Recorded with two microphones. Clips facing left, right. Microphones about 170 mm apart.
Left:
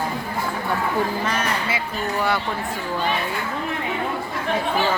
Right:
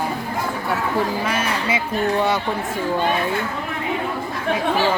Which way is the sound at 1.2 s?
10° right (ahead or behind).